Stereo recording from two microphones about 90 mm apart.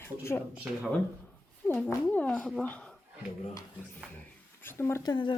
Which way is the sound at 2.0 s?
15° left (ahead or behind).